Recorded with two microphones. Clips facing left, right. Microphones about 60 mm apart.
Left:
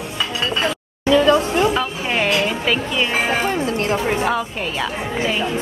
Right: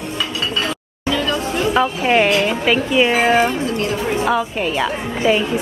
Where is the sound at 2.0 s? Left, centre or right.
Centre.